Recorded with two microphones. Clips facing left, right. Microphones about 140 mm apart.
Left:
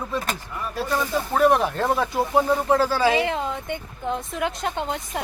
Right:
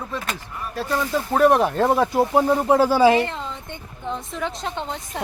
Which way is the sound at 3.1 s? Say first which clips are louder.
Right 1 dB; 90° left.